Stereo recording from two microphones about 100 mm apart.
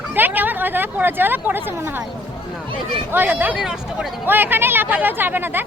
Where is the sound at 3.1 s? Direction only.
20° right (ahead or behind).